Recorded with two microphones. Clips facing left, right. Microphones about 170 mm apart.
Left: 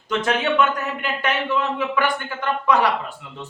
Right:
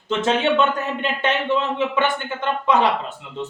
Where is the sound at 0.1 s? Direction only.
25° right (ahead or behind).